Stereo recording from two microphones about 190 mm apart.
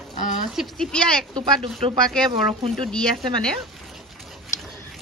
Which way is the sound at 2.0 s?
5° left (ahead or behind).